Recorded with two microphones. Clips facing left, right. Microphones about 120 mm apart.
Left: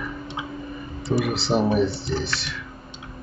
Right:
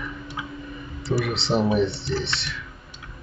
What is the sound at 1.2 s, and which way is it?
Speech, centre (ahead or behind).